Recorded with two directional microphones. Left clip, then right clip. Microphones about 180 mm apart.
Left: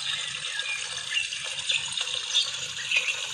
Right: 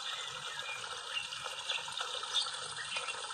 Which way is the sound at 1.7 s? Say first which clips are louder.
Left 11 dB; 50° right (ahead or behind).